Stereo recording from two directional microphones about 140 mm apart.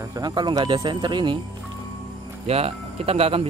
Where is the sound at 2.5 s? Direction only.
45° right (ahead or behind).